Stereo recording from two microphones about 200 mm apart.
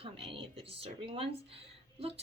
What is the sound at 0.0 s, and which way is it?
A woman's voice, 30° right (ahead or behind).